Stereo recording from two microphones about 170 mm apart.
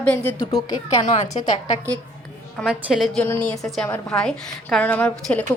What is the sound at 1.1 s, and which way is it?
Speech, 40° left (ahead or behind).